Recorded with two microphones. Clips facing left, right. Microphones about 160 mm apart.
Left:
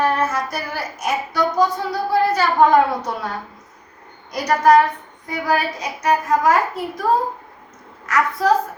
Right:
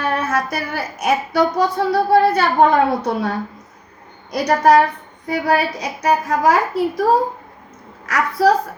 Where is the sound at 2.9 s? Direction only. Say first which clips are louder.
Right 5 dB; 30° right (ahead or behind).